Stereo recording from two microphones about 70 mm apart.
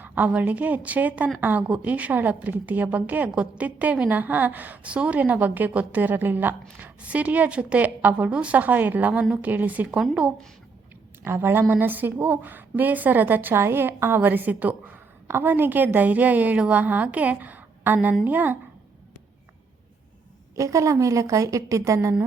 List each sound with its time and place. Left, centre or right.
0.0 s a woman's voice: right
11.2 s a woman's voice: right
20.6 s a woman's voice: right